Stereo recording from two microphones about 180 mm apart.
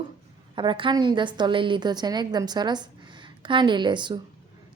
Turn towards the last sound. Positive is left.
turn(degrees=-25)  # may be behind; listen again after turning